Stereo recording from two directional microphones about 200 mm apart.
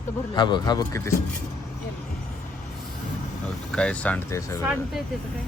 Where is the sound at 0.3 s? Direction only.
20° left (ahead or behind).